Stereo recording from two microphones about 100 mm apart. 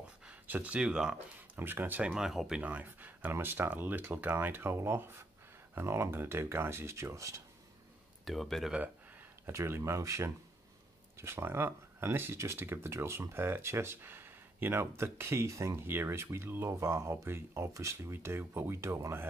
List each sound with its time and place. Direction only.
0.2 s speech: 15° right (ahead or behind)
1.1 s speech: 20° right (ahead or behind)
8.3 s speech: centre (ahead or behind)
9.5 s speech: 30° right (ahead or behind)